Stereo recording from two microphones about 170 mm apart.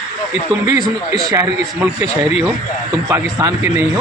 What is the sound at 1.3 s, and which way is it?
Speech, 15° right (ahead or behind).